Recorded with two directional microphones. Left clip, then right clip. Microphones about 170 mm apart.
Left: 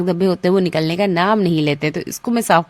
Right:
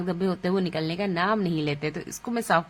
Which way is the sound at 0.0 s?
45° left (ahead or behind).